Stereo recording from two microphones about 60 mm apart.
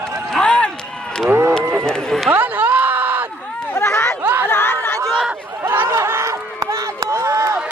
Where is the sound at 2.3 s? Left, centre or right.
Right.